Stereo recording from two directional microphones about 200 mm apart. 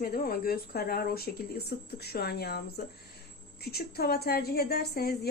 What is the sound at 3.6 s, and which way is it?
Speech, 50° left (ahead or behind).